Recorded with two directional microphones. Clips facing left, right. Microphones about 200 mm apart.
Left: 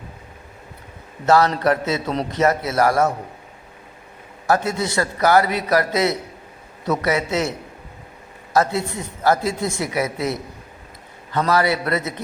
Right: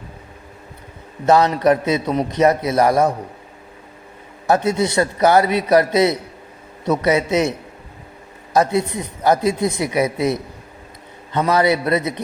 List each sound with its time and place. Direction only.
1.3 s a man's voice: 20° right (ahead or behind)
4.4 s a man's voice: 20° right (ahead or behind)
8.5 s a man's voice: 20° right (ahead or behind)